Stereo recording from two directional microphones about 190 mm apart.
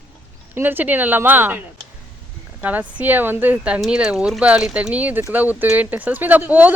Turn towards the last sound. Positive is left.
turn(degrees=-10)  # may be behind; listen again after turning